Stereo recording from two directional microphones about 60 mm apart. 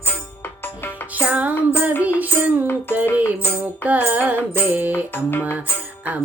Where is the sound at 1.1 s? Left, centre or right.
Right.